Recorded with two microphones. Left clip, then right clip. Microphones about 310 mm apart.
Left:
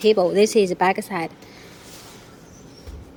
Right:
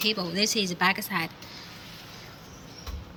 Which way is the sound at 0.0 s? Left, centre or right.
Centre.